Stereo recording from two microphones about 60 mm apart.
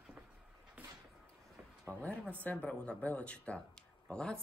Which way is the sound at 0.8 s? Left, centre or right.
Right.